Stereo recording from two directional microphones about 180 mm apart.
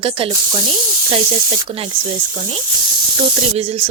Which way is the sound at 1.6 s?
30° right (ahead or behind).